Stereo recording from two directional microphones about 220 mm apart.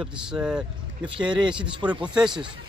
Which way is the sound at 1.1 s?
20° right (ahead or behind).